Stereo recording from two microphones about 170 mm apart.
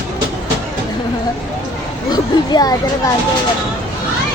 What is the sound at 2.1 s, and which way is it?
Speech, 25° left (ahead or behind).